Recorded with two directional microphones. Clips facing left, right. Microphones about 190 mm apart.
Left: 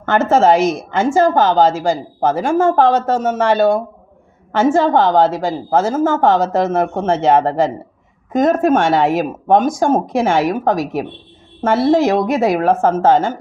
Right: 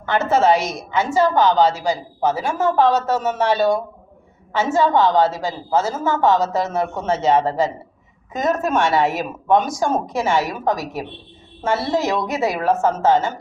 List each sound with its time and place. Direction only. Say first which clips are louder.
0.0 s a woman's voice: left 4 dB; 50° left (ahead or behind)